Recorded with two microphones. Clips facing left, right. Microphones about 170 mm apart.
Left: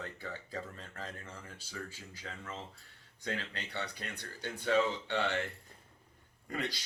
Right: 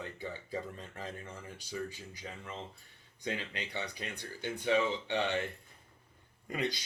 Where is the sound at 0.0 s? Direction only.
15° right (ahead or behind).